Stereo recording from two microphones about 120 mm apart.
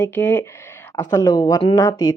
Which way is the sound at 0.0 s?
15° left (ahead or behind).